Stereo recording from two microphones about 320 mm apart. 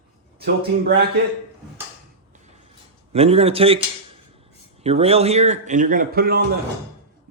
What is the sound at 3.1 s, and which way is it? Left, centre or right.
Speech, centre.